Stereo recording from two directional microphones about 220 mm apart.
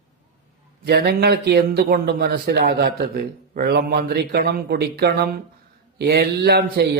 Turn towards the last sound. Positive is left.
turn(degrees=-45)  # may be behind; listen again after turning